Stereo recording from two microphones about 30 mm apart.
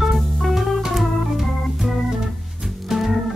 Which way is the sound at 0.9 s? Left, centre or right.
Centre.